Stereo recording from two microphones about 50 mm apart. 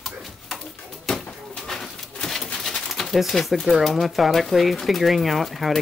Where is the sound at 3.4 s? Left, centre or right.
Centre.